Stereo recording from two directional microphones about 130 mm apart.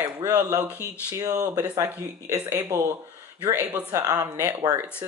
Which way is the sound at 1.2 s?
25° right (ahead or behind).